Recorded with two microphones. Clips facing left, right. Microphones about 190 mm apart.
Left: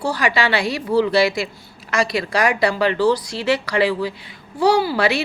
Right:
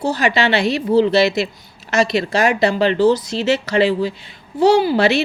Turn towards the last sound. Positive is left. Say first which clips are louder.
# right 4 dB
turn(degrees=-25)  # may be behind; listen again after turning